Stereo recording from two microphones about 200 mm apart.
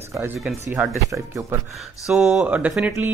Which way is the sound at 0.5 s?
5° right (ahead or behind).